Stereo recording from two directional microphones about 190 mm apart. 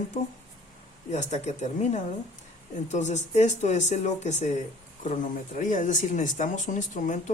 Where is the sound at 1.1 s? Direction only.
40° left (ahead or behind).